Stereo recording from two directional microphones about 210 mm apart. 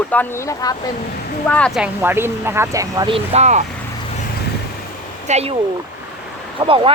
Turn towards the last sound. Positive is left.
turn(degrees=-25)  # may be behind; listen again after turning